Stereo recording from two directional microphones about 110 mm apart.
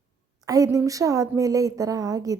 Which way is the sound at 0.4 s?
35° right (ahead or behind).